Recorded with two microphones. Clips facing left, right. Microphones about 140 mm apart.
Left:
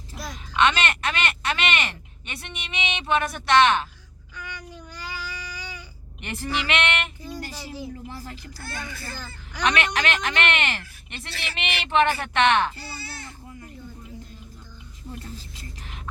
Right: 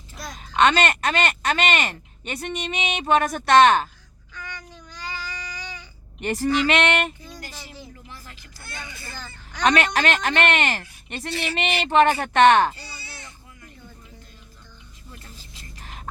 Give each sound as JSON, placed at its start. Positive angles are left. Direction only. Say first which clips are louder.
{"t": 0.5, "sound": "speech", "louder": "right 3 dB", "side_deg": -40}
{"t": 4.4, "sound": "child singing", "louder": "left 1 dB", "side_deg": 10}
{"t": 6.1, "sound": "speech", "louder": "right 8 dB", "side_deg": -40}
{"t": 8.1, "sound": "speech", "louder": "left 6 dB", "side_deg": 35}
{"t": 8.7, "sound": "a child's voice", "louder": "left 2 dB", "side_deg": -20}
{"t": 9.2, "sound": "speech", "louder": "right 5 dB", "side_deg": 10}
{"t": 9.6, "sound": "speech", "louder": "right 4 dB", "side_deg": -35}